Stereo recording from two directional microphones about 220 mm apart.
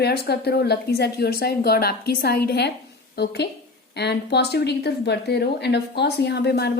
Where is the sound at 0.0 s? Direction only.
45° left (ahead or behind).